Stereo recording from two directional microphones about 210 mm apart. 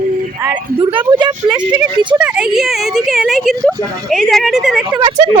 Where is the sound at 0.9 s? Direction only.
25° right (ahead or behind).